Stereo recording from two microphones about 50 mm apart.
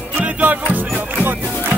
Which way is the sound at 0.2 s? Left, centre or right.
Right.